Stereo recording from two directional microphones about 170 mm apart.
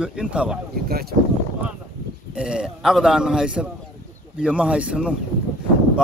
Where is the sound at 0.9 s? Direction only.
65° right (ahead or behind).